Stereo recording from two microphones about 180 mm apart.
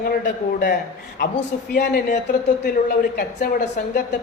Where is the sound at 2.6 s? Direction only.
55° left (ahead or behind).